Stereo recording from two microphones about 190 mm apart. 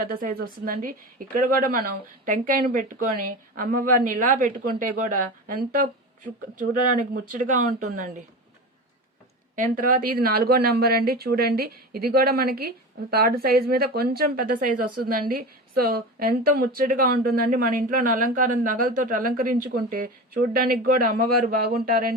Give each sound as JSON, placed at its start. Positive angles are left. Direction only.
{"t": 0.0, "sound": "speech", "side_deg": -50}
{"t": 7.3, "sound": "speech", "side_deg": -45}
{"t": 9.7, "sound": "speech", "side_deg": -45}